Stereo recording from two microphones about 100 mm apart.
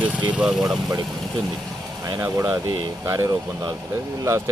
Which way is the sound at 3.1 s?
35° right (ahead or behind).